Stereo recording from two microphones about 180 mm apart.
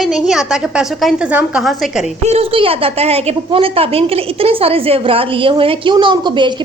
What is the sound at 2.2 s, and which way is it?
A woman's voice, 35° right (ahead or behind).